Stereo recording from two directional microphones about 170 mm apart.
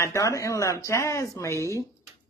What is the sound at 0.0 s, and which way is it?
Speech, 20° left (ahead or behind).